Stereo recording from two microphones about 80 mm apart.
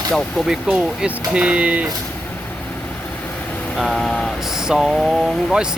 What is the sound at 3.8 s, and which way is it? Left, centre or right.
Speech, centre.